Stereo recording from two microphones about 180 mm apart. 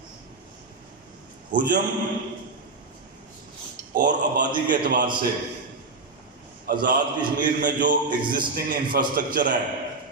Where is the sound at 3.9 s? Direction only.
45° right (ahead or behind).